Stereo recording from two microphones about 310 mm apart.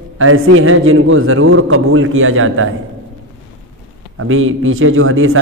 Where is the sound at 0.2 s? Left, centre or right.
Right.